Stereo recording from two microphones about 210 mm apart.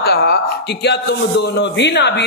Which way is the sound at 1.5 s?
55° left (ahead or behind).